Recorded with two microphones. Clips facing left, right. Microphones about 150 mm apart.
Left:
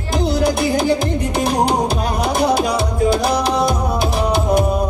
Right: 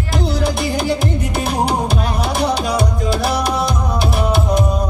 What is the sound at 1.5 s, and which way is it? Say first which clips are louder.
Music: left 1 dB; 15° left (ahead or behind).